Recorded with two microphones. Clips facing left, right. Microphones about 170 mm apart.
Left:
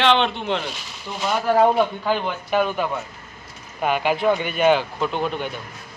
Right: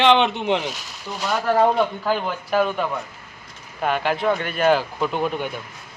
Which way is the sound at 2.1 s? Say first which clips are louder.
Even; centre (ahead or behind).